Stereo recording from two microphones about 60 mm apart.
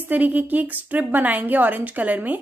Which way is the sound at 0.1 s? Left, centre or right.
Right.